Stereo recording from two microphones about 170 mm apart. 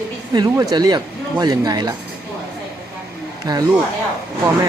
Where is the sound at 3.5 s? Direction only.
25° right (ahead or behind).